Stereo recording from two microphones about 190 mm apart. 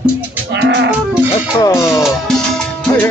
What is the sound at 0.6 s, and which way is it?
Moo, 65° right (ahead or behind).